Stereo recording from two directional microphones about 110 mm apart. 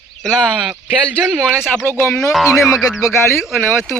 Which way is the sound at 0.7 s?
10° right (ahead or behind).